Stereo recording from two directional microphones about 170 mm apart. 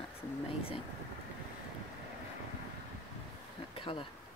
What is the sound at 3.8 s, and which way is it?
Speech, 30° left (ahead or behind).